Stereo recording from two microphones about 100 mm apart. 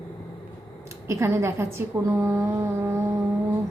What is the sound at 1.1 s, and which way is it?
Speech, 30° right (ahead or behind).